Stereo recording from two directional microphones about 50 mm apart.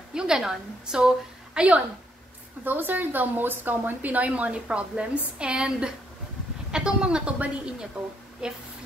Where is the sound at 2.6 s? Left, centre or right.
Right.